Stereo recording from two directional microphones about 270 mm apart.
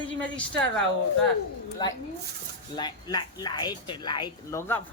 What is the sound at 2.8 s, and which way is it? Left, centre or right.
Speech, centre.